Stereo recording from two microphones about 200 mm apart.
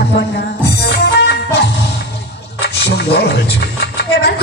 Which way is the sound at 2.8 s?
55° left (ahead or behind).